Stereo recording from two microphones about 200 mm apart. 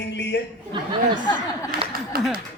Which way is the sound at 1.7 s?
50° right (ahead or behind).